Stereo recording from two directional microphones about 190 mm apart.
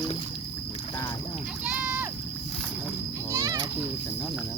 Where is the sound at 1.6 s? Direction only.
10° right (ahead or behind).